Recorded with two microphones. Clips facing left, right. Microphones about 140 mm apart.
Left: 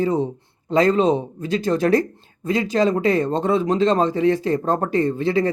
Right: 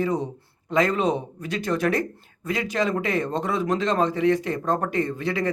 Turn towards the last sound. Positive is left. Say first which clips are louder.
# left 6 dB
turn(degrees=30)  # may be behind; listen again after turning